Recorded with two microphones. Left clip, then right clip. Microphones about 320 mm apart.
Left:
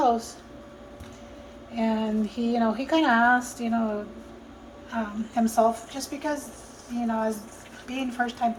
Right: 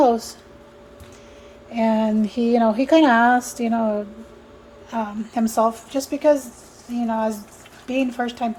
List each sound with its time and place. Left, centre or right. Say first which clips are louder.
1.7 s a woman's voice: right 7 dB; right